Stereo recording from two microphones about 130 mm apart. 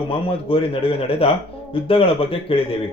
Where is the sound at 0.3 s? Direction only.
45° left (ahead or behind).